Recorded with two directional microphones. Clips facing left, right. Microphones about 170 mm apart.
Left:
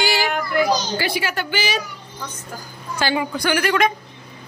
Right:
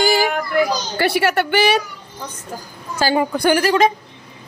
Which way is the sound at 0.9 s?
65° right (ahead or behind).